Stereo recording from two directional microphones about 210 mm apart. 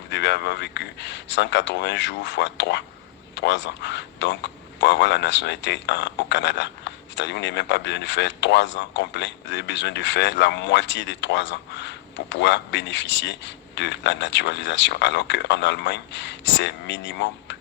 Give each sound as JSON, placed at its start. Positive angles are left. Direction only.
{"t": 0.1, "sound": "a man's voice", "side_deg": 55}